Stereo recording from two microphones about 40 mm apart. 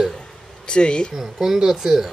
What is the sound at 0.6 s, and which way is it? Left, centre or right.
Speech, left.